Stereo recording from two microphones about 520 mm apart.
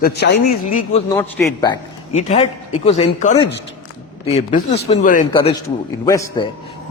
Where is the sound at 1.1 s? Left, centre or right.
Centre.